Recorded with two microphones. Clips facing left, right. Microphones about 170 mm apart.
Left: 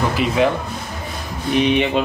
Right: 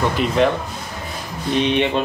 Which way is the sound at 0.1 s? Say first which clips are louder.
Even; 5° left (ahead or behind).